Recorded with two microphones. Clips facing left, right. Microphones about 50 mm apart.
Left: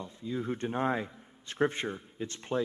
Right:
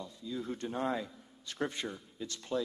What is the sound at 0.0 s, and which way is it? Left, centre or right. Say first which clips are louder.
A man's voice: left 4 dB; left.